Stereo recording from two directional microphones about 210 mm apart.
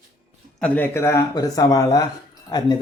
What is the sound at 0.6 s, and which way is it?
Speech, 10° left (ahead or behind).